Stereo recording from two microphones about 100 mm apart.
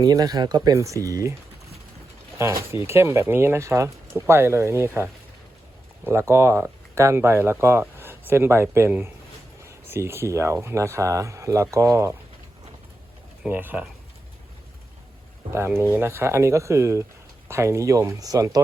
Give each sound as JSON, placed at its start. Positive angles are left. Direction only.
{"t": 0.0, "sound": "speech", "side_deg": -40}
{"t": 2.4, "sound": "speech", "side_deg": -30}
{"t": 6.1, "sound": "speech", "side_deg": -25}
{"t": 13.5, "sound": "speech", "side_deg": -20}
{"t": 15.5, "sound": "speech", "side_deg": -25}